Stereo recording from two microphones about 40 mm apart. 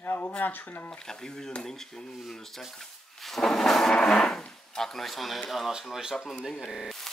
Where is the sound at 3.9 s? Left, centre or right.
Centre.